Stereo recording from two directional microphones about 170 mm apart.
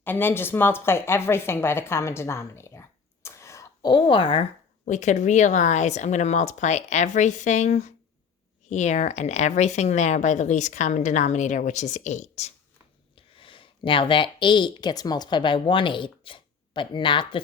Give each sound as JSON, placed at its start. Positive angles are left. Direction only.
{"t": 0.0, "sound": "a woman's voice", "side_deg": 10}
{"t": 3.2, "sound": "a sound", "side_deg": 15}
{"t": 4.9, "sound": "speech", "side_deg": 45}
{"t": 13.1, "sound": "speech", "side_deg": 30}